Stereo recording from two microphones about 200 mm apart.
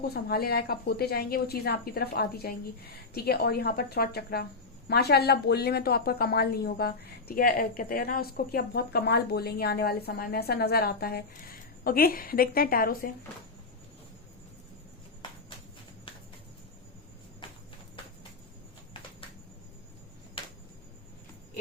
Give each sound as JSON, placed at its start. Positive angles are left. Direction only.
{"t": 0.0, "sound": "speech", "side_deg": 50}
{"t": 17.4, "sound": "clip-clop", "side_deg": 25}